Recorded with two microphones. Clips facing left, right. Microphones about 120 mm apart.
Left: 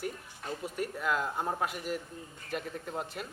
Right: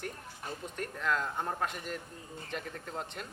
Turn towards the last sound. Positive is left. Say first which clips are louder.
# left 3 dB
turn(degrees=5)  # may be behind; listen again after turning